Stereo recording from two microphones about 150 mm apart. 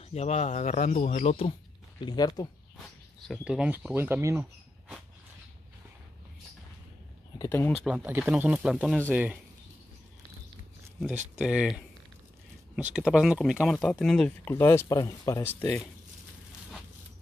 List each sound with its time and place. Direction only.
0.0 s speech: 45° left (ahead or behind)
2.0 s speech: 25° left (ahead or behind)
3.3 s speech: 5° right (ahead or behind)
7.3 s speech: 15° left (ahead or behind)
7.7 s speech: 5° right (ahead or behind)
11.3 s speech: 5° right (ahead or behind)
12.9 s speech: 5° right (ahead or behind)
14.5 s speech: 15° left (ahead or behind)